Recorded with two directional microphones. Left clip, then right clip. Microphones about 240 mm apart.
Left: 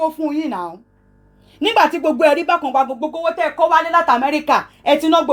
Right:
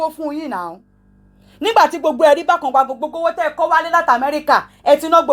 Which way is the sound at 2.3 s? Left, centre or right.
Right.